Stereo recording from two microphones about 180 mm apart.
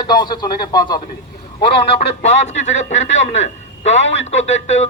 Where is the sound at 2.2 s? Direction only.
40° left (ahead or behind).